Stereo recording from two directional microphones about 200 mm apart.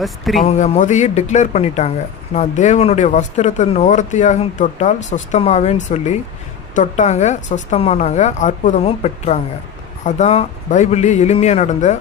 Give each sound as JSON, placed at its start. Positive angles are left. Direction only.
{"t": 0.0, "sound": "speech", "side_deg": 0}
{"t": 0.4, "sound": "speech", "side_deg": 35}